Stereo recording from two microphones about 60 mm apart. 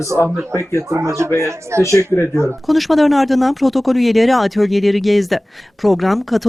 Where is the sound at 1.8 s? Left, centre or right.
Left.